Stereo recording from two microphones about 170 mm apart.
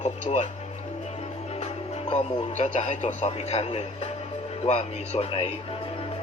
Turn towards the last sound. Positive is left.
turn(degrees=35)  # may be behind; listen again after turning